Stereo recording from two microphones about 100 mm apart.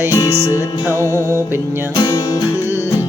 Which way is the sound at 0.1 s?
30° left (ahead or behind).